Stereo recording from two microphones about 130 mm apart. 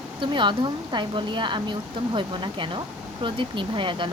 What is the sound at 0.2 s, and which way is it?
Speech, 35° right (ahead or behind).